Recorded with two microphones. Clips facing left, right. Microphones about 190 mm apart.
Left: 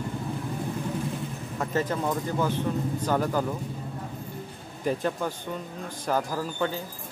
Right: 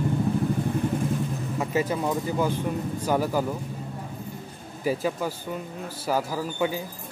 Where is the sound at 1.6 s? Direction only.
10° right (ahead or behind).